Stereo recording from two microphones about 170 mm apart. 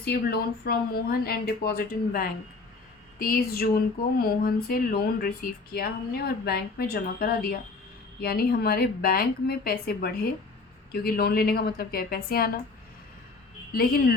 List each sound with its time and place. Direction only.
0.0 s speech: 70° left (ahead or behind)
13.7 s speech: 55° left (ahead or behind)